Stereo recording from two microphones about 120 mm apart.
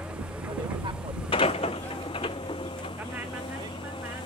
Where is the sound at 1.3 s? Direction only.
55° left (ahead or behind).